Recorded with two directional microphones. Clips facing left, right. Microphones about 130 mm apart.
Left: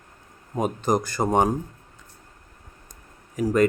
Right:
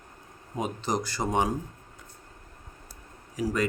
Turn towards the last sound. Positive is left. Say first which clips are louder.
# left 5 dB
turn(degrees=50)  # may be behind; listen again after turning